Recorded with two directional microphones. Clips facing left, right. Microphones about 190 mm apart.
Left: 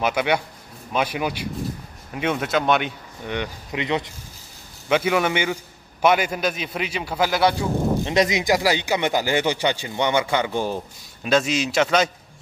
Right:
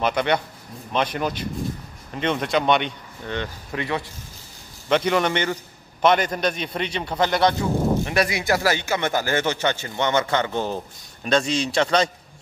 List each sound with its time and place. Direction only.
0.0 s a man's voice: 5° left (ahead or behind)
3.3 s speech: 15° left (ahead or behind)
4.8 s a man's voice: 5° left (ahead or behind)
8.0 s a man's voice: 20° left (ahead or behind); by 12.1 s 5° left (ahead or behind)